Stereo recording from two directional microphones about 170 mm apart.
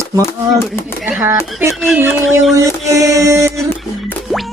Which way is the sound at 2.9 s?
20° right (ahead or behind).